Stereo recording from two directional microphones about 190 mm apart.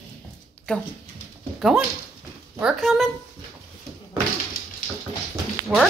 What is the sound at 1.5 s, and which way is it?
Speech, centre (ahead or behind).